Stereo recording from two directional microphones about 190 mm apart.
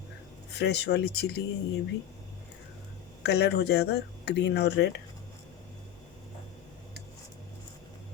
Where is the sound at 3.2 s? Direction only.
60° left (ahead or behind).